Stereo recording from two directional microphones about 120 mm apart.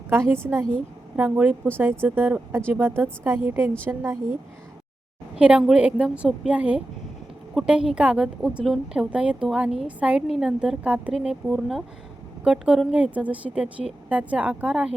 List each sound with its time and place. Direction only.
0.4 s a woman's voice: 20° right (ahead or behind)
5.4 s a woman's voice: 10° right (ahead or behind)